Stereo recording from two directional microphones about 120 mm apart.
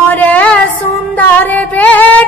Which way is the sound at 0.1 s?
15° left (ahead or behind).